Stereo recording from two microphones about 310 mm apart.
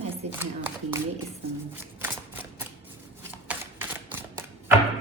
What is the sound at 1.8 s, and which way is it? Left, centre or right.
Shuffling cards, centre.